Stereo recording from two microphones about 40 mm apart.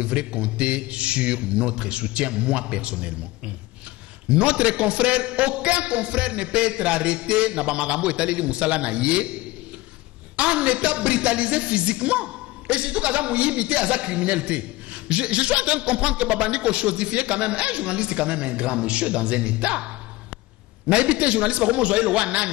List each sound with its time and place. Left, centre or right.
0.0 s speech: right
20.9 s speech: right